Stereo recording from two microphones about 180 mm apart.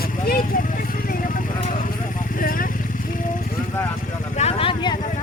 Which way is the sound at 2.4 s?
50° left (ahead or behind).